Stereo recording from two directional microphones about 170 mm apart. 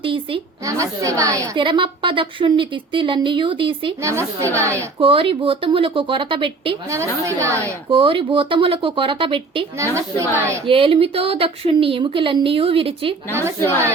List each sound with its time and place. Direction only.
0.0 s a woman's voice: 30° right (ahead or behind)
0.6 s a woman's voice: 20° right (ahead or behind)
4.0 s speech: 15° right (ahead or behind)
4.9 s speech: 30° right (ahead or behind)
6.9 s speech: 15° right (ahead or behind)
7.9 s speech: 30° right (ahead or behind)
9.7 s speech: 15° right (ahead or behind)
10.7 s speech: 30° right (ahead or behind)